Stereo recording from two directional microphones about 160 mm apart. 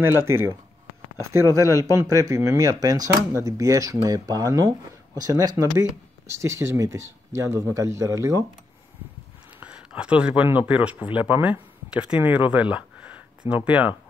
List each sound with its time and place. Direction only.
0.2 s speech: 15° right (ahead or behind)
9.6 s speech: 5° right (ahead or behind)
12.7 s a sound: 10° right (ahead or behind)
13.7 s speech: 10° right (ahead or behind)